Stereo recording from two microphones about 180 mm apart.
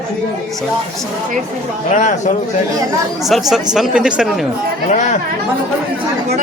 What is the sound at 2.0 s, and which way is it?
Speech, 40° left (ahead or behind).